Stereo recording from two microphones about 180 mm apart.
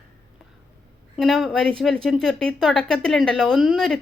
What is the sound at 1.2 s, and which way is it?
Speech, centre (ahead or behind).